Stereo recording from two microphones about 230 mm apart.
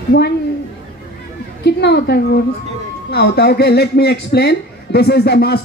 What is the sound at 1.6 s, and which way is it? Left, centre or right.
A man's voice, left.